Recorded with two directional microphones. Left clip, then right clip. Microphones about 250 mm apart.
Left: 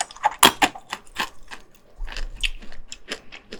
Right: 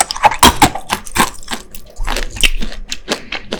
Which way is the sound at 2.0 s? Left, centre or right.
Right.